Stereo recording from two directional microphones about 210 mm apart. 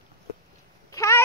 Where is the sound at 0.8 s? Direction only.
15° left (ahead or behind).